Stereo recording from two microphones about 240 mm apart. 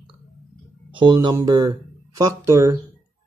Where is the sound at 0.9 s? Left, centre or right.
Centre.